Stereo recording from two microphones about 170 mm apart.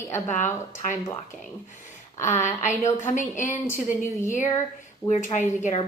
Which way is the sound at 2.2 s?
45° left (ahead or behind).